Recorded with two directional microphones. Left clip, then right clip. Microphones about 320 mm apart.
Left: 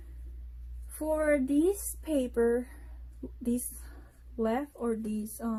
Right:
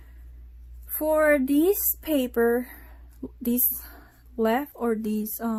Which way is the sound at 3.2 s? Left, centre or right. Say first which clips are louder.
Right 6 dB; right.